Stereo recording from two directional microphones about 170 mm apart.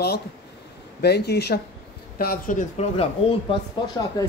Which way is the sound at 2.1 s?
55° left (ahead or behind).